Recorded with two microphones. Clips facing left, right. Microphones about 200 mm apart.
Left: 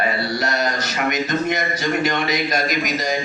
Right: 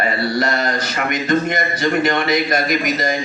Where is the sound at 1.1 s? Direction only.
55° right (ahead or behind).